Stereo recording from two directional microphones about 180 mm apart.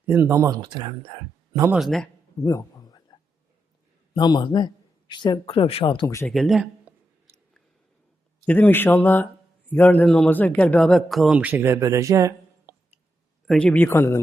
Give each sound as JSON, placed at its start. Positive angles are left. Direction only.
{"t": 0.0, "sound": "speech", "side_deg": -10}
{"t": 1.6, "sound": "a man's voice", "side_deg": -5}
{"t": 2.4, "sound": "a sound", "side_deg": 20}
{"t": 4.1, "sound": "speech", "side_deg": 25}
{"t": 6.2, "sound": "speech", "side_deg": 0}
{"t": 8.4, "sound": "a man's voice", "side_deg": 10}
{"t": 13.5, "sound": "speech", "side_deg": 5}